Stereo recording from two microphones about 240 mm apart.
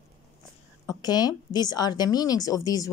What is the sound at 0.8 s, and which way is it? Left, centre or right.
A woman's voice, centre.